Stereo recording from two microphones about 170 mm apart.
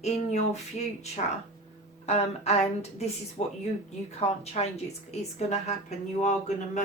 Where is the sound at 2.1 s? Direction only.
40° left (ahead or behind).